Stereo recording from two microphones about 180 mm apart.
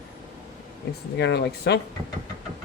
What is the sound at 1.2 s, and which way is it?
Speech, 70° left (ahead or behind).